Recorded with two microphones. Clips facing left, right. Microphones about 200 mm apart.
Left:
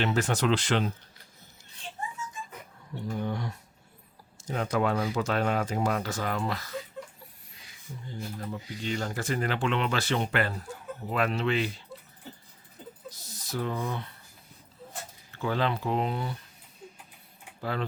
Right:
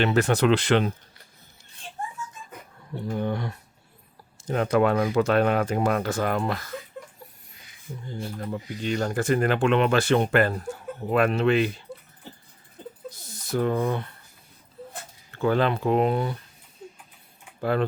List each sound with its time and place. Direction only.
0.0 s speech: 60° right (ahead or behind)
3.2 s speech: 60° right (ahead or behind)
8.4 s speech: 55° right (ahead or behind)
13.3 s speech: 55° right (ahead or behind)
15.3 s speech: 55° right (ahead or behind)
17.6 s speech: 55° right (ahead or behind)